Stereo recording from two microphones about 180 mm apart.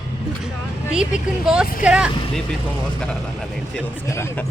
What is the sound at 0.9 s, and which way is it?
Speech, 5° right (ahead or behind).